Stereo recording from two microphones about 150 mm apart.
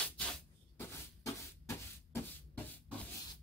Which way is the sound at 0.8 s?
15° left (ahead or behind).